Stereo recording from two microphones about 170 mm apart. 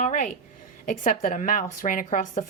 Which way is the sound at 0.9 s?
50° left (ahead or behind).